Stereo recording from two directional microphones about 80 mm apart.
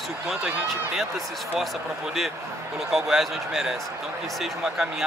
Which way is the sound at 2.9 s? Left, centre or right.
Centre.